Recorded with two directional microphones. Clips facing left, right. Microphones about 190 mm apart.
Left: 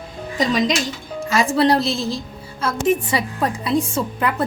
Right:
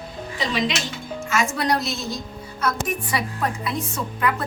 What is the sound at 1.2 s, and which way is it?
A woman's voice, 35° left (ahead or behind).